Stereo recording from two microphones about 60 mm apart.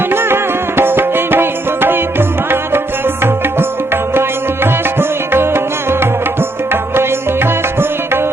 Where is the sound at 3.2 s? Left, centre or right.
Right.